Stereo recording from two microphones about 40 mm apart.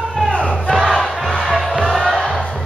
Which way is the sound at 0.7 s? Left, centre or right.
Centre.